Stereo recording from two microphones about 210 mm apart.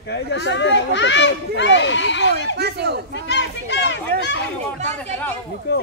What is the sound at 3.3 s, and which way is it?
Speech, 55° left (ahead or behind).